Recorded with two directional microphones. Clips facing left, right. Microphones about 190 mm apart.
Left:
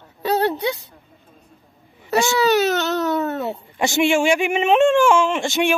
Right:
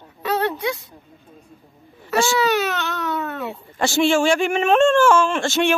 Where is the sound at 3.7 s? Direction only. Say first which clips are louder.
Even; 15° left (ahead or behind).